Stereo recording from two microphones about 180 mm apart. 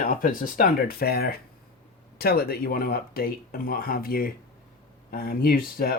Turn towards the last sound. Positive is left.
turn(degrees=55)  # may be behind; listen again after turning